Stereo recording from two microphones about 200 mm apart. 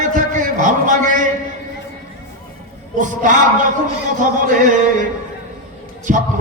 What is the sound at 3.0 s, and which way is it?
A man's voice, 40° right (ahead or behind).